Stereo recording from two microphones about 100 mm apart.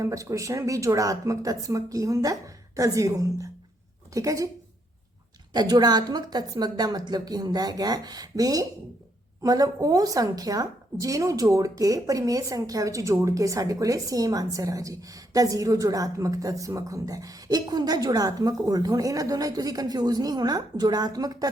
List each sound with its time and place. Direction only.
0.0 s a woman's voice: 30° right (ahead or behind)
5.5 s a woman's voice: 45° right (ahead or behind)